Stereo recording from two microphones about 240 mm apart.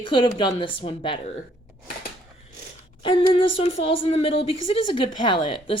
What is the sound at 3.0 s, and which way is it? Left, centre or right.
Speech, left.